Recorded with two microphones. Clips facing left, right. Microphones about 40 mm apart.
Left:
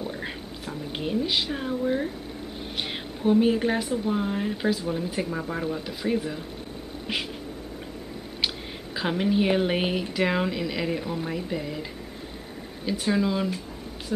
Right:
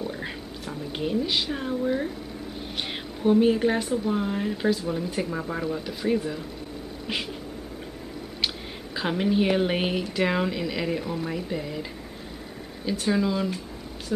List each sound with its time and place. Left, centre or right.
0.1 s a sound: centre
2.8 s a woman's voice: centre
8.9 s speech: centre
12.8 s speech: centre